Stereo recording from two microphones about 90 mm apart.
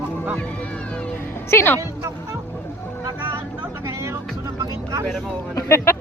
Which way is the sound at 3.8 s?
30° right (ahead or behind).